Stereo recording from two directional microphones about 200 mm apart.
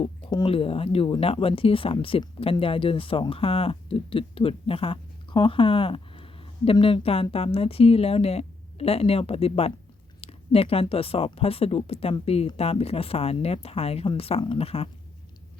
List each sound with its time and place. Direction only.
0.0 s speech: 25° left (ahead or behind)